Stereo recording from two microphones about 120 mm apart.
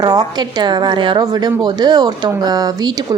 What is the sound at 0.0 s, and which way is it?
A woman's voice, 30° right (ahead or behind).